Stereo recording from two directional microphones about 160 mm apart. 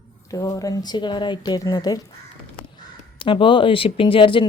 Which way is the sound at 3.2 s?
30° left (ahead or behind).